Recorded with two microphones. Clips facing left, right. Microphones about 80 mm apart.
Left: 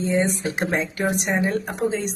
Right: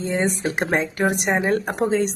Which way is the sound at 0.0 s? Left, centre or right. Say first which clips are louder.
Left 1 dB; right.